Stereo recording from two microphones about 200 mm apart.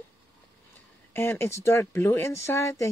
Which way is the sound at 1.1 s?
10° left (ahead or behind).